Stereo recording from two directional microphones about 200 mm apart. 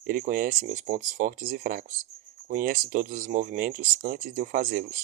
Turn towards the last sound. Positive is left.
turn(degrees=-45)  # may be behind; listen again after turning